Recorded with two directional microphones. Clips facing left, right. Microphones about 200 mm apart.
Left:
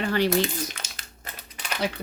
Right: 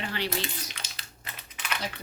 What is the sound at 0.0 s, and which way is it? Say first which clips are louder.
Crumpling: left 9 dB; 45° left (ahead or behind).